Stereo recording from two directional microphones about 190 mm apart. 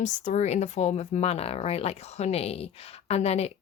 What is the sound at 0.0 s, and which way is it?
Speech, 35° left (ahead or behind).